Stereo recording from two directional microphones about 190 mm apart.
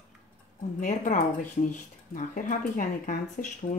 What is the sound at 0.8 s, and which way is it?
Speech, 40° left (ahead or behind).